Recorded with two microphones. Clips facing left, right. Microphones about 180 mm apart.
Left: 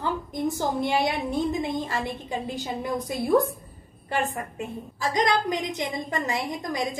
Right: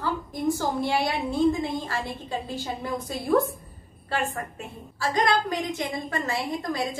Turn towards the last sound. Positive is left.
turn(degrees=15)  # may be behind; listen again after turning